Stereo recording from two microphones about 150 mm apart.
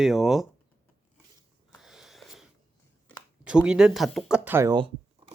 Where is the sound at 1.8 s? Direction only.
Centre (ahead or behind).